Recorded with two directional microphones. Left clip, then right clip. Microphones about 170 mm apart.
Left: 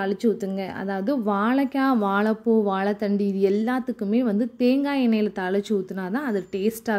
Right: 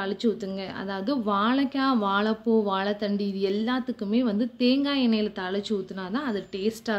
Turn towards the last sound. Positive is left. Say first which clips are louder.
# left 3 dB
turn(degrees=45)  # may be behind; listen again after turning